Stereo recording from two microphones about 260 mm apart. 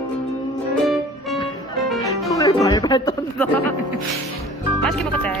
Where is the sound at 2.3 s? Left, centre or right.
Centre.